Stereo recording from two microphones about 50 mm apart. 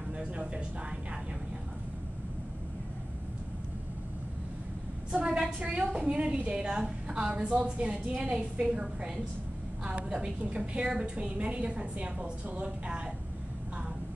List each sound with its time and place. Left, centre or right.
0.2 s speech: right
5.1 s a woman's voice: centre